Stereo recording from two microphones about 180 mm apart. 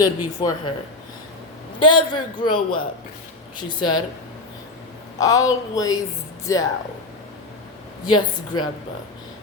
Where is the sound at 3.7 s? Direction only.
25° left (ahead or behind).